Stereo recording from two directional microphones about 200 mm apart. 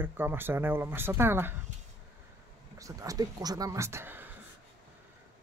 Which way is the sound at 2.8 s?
15° right (ahead or behind).